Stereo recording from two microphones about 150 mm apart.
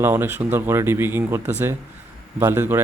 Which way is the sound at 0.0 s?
15° right (ahead or behind).